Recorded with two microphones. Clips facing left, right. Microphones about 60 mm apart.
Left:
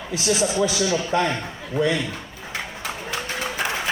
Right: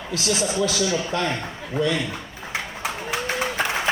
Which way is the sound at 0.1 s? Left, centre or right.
Centre.